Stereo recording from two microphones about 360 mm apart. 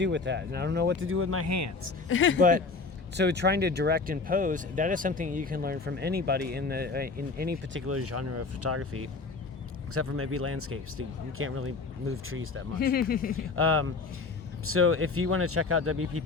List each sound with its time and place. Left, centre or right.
0.0 s speech: right
2.0 s speech: left
2.4 s speech: right
12.8 s speech: left
13.6 s speech: right